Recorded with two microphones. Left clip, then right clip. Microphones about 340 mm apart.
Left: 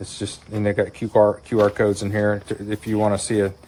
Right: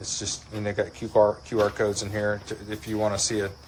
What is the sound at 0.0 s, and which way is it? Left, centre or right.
Speech, left.